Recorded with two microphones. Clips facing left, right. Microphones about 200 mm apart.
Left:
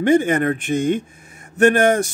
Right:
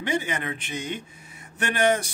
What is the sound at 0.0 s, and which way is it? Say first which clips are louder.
Speech: left 12 dB; 50° left (ahead or behind).